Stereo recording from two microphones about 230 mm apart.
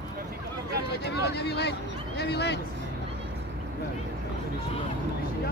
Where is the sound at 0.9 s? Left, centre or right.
Left.